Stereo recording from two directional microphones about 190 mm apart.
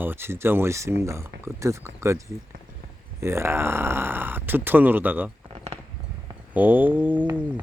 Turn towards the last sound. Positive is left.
turn(degrees=-10)  # may be behind; listen again after turning